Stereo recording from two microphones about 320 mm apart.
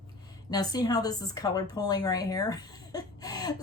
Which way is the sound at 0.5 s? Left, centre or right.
Centre.